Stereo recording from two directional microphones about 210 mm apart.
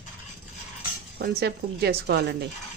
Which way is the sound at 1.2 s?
50° right (ahead or behind).